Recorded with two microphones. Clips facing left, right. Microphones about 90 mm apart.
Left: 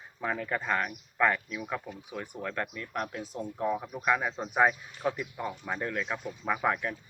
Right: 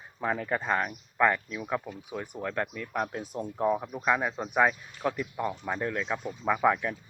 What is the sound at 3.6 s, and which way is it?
Speech, 30° right (ahead or behind).